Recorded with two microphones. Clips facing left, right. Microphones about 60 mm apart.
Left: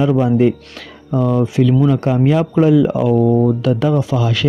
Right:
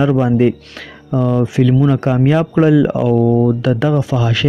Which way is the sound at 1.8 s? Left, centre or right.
Right.